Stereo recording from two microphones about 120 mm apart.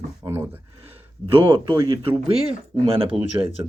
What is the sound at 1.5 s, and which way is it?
Speech, 40° right (ahead or behind).